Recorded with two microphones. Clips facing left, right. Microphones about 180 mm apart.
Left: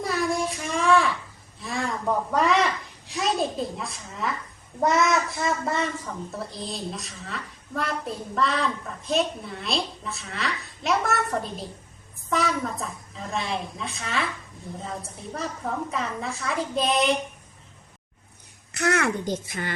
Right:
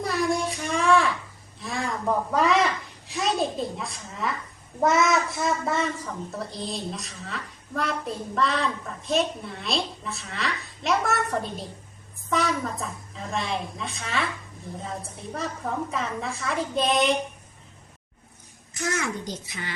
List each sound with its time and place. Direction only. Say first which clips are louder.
0.0 s a sound: even; centre (ahead or behind)
4.8 s a child's voice: even; centre (ahead or behind)
18.7 s a child's voice: left 5 dB; 65° left (ahead or behind); by 19.7 s 50° left (ahead or behind)